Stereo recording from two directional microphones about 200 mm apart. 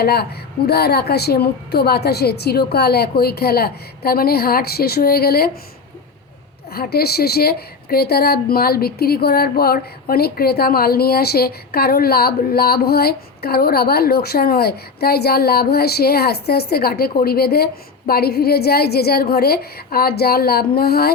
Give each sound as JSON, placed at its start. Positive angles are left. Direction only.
{"t": 0.0, "sound": "a woman's voice", "side_deg": 50}
{"t": 6.7, "sound": "a woman's voice", "side_deg": 50}